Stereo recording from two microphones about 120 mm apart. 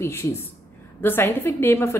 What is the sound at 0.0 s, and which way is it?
A woman's voice, 20° left (ahead or behind).